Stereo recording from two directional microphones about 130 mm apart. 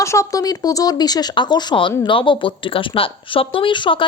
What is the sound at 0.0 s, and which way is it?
A woman's voice, 25° left (ahead or behind).